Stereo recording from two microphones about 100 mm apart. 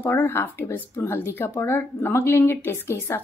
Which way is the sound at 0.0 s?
20° left (ahead or behind).